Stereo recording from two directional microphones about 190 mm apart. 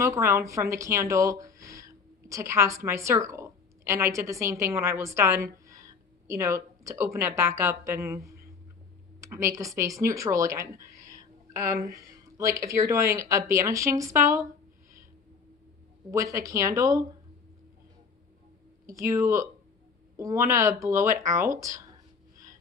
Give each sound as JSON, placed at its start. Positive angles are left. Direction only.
{"t": 0.0, "sound": "a woman's voice", "side_deg": -15}
{"t": 16.1, "sound": "speech", "side_deg": -15}
{"t": 18.9, "sound": "speech", "side_deg": -15}